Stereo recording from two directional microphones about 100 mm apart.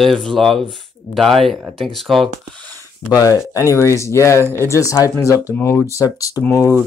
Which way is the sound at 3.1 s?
35° left (ahead or behind).